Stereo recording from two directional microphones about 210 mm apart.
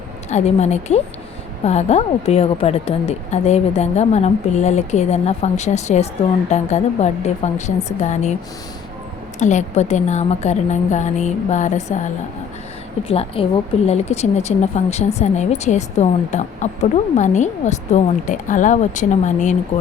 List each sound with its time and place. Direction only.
0.3 s a woman's voice: 30° left (ahead or behind)
9.4 s a woman's voice: 35° left (ahead or behind)
13.1 s a woman's voice: 25° left (ahead or behind)